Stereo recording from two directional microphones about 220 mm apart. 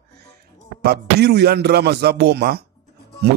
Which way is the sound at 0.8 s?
50° right (ahead or behind).